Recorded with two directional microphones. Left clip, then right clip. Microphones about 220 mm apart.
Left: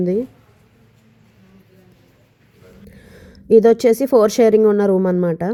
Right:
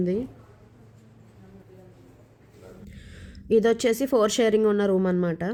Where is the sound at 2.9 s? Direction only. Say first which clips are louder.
Left 5 dB; 15° left (ahead or behind).